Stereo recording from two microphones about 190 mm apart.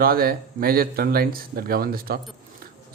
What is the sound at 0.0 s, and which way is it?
Speech, 50° right (ahead or behind).